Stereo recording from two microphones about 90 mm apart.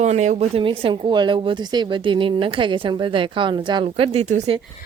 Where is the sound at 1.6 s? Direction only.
60° right (ahead or behind); by 4.5 s 80° right.